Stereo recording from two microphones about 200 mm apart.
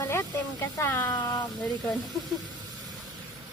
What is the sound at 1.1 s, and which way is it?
Speech, 20° left (ahead or behind).